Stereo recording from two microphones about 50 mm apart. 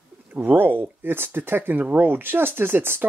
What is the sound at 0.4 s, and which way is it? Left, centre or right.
Speech, right.